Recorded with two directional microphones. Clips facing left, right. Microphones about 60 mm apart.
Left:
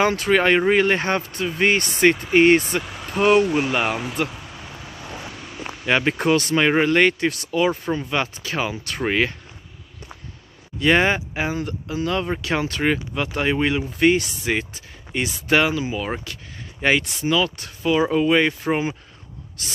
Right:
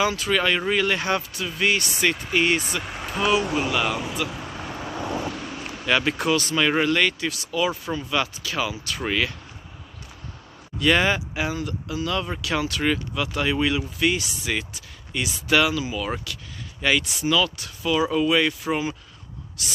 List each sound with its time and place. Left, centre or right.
0.0 s speech: left
0.3 s speech: left
2.8 s speech: centre
3.2 s speech: left
3.5 s speech: left
5.9 s speech: left
10.8 s speech: left